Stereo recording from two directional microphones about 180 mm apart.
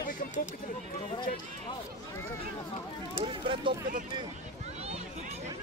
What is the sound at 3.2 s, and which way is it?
Speech, 30° right (ahead or behind).